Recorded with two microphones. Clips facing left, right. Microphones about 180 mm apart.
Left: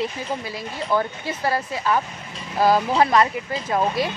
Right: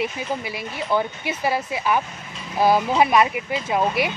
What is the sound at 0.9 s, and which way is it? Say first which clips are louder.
Speech: even; 20° right (ahead or behind).